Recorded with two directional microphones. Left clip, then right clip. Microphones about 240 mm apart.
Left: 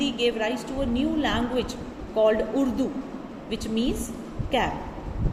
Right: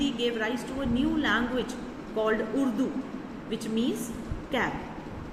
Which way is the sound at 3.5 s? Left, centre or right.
Centre.